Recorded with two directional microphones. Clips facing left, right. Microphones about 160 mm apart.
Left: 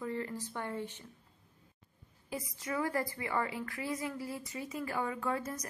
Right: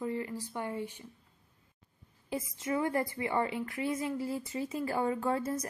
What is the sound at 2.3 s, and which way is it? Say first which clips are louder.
A woman's voice: right 4 dB; 25° right (ahead or behind).